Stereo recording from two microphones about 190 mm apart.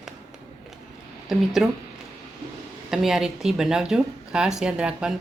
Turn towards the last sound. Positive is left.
turn(degrees=-5)  # may be behind; listen again after turning